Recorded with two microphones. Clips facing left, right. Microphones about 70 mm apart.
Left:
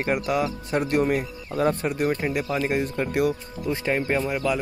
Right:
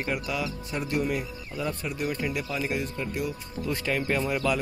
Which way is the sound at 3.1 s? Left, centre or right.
Left.